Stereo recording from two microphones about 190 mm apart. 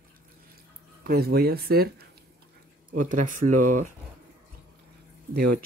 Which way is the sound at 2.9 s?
45° right (ahead or behind).